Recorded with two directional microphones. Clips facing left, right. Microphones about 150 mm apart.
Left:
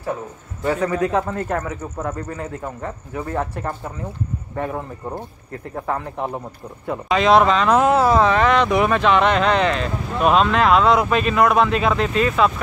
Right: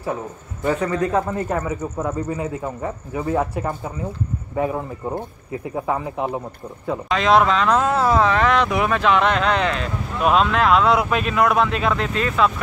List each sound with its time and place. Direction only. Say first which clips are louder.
0.7 s speech: left 1 dB; 5° left (ahead or behind)
1.3 s speech: right 1 dB; 5° right (ahead or behind)
7.7 s speech: left 3 dB; 15° left (ahead or behind)
8.1 s speech: left 1 dB; centre (ahead or behind)